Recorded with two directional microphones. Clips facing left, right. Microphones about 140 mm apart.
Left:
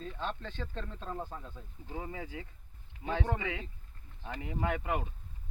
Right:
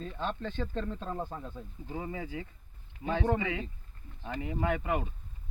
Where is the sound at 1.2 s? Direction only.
25° right (ahead or behind).